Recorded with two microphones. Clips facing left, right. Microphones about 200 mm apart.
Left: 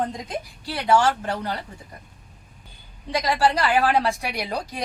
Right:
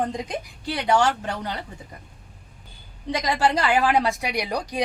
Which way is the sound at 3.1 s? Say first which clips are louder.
Left 1 dB; 20° right (ahead or behind).